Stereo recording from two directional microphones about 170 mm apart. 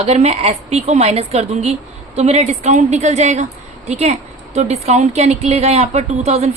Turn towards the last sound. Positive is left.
turn(degrees=-40)  # may be behind; listen again after turning